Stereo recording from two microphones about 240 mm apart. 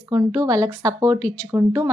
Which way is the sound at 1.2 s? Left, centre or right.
Centre.